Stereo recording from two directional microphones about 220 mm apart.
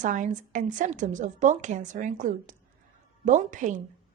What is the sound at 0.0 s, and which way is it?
A woman's voice, 35° right (ahead or behind).